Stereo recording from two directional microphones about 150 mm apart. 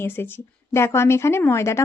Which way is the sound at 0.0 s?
15° left (ahead or behind).